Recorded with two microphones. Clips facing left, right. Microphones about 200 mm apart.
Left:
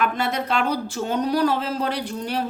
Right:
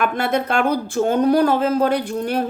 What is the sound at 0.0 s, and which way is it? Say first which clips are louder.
Speech: right 4 dB; 50° right (ahead or behind).